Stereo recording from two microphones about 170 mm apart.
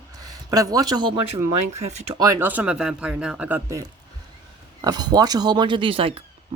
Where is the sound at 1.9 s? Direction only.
40° right (ahead or behind).